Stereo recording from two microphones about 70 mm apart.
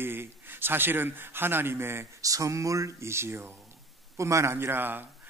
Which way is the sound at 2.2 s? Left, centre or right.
Right.